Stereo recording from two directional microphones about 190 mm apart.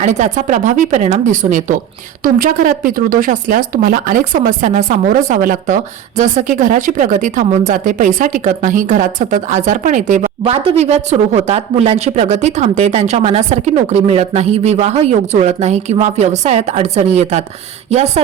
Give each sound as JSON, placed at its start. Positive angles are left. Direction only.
{"t": 0.0, "sound": "speech", "side_deg": -40}